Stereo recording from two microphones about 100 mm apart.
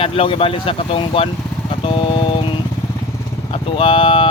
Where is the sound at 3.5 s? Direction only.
65° left (ahead or behind).